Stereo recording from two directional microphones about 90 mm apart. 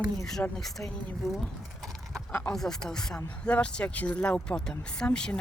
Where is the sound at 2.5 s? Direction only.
5° left (ahead or behind).